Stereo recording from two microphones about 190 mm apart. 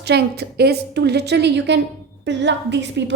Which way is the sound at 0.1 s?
60° right (ahead or behind).